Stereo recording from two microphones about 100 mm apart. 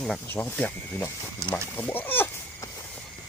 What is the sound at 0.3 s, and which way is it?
Speech, 20° left (ahead or behind).